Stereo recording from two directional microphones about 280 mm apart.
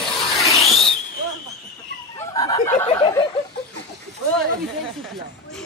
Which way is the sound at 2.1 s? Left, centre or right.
Centre.